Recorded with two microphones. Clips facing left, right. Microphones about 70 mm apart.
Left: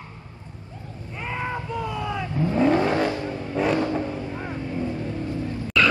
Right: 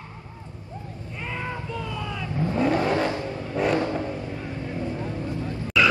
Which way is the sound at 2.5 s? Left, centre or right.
Left.